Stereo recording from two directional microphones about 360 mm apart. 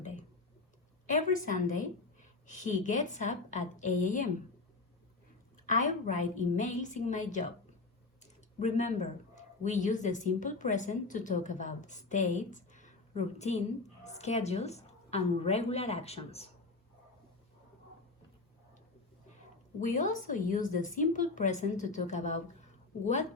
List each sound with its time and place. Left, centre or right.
1.0 s a woman's voice: left
5.6 s a woman's voice: left
19.8 s a woman's voice: left